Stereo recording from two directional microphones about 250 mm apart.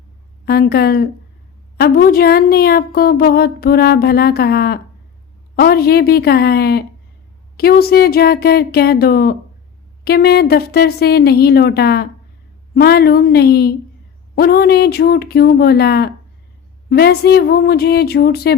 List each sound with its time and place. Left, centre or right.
0.4 s a woman's voice: left